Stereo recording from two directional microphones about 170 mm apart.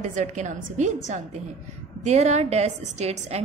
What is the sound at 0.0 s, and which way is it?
A woman's voice, 45° right (ahead or behind).